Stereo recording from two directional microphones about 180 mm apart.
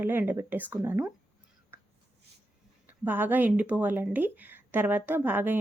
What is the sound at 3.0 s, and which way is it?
Speech, 10° right (ahead or behind).